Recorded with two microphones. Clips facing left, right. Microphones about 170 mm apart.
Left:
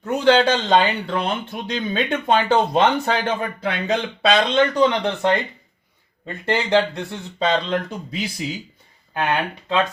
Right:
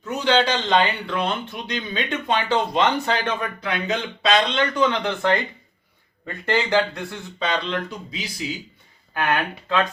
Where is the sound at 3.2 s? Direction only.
30° left (ahead or behind).